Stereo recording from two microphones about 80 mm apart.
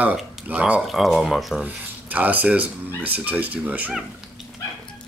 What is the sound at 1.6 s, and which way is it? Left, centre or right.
Speech, centre.